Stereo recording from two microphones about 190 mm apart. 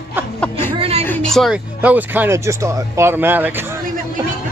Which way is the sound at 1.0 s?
5° left (ahead or behind).